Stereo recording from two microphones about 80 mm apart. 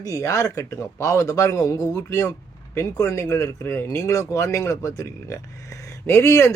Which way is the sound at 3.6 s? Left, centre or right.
Left.